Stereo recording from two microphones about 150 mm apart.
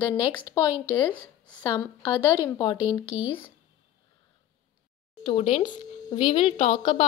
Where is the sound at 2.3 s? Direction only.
30° left (ahead or behind).